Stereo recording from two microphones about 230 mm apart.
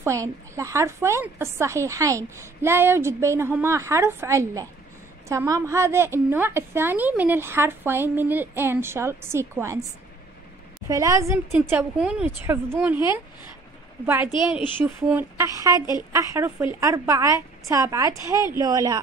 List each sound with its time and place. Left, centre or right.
0.0 s a woman's voice: centre
10.9 s a woman's voice: centre